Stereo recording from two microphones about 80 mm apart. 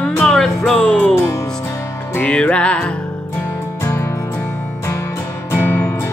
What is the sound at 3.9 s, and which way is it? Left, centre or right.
Music, left.